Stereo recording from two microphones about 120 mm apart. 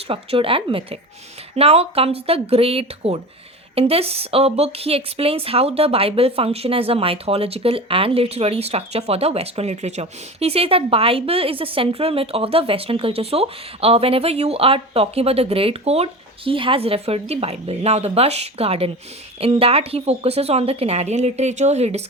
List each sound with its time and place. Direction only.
0.1 s speech: 50° right (ahead or behind); by 22.0 s 65° right (ahead or behind)